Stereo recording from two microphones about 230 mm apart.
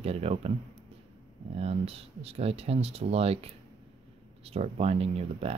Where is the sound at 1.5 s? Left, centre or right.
Right.